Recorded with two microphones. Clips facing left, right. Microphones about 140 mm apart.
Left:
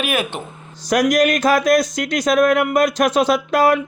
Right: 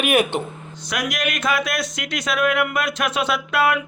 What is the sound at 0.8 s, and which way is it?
Speech, 40° left (ahead or behind).